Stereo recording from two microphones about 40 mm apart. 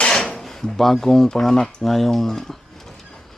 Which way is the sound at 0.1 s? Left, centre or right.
Centre.